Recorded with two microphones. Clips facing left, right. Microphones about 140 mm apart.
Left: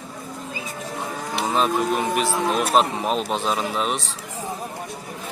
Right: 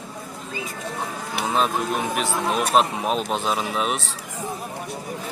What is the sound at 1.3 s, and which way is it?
Speech, centre (ahead or behind).